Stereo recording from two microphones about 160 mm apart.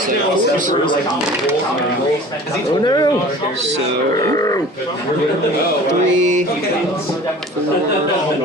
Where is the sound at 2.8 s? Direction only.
25° left (ahead or behind).